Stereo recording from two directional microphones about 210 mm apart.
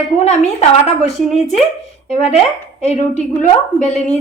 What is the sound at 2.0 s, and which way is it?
A woman's voice, 30° left (ahead or behind).